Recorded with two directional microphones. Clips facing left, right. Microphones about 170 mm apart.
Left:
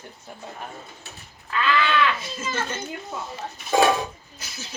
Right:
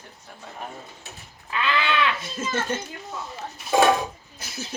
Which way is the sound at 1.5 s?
20° right (ahead or behind).